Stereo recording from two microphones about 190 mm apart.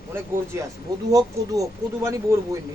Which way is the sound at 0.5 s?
15° right (ahead or behind).